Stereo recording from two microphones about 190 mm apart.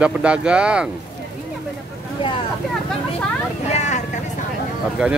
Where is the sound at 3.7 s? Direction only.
35° left (ahead or behind).